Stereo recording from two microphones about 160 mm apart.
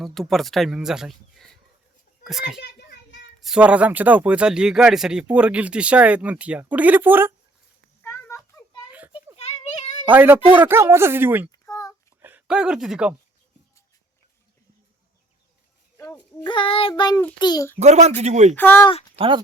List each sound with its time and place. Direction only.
0.0 s speech: centre (ahead or behind)
2.6 s a sound: 90° left
3.4 s a man's voice: 5° right (ahead or behind)
8.0 s a sound: 15° left (ahead or behind)
8.9 s children playing: 10° right (ahead or behind)
9.3 s a sound: 40° left (ahead or behind)
10.1 s a man's voice: 10° right (ahead or behind)
11.5 s a sound: 20° left (ahead or behind)
12.2 s speech: 10° right (ahead or behind)
16.4 s child singing: 30° left (ahead or behind)
17.4 s a child's voice: 25° left (ahead or behind)
17.7 s speech: 45° right (ahead or behind)
18.5 s speech: 15° left (ahead or behind)